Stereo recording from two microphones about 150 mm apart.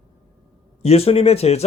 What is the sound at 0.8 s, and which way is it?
Speech, 40° left (ahead or behind).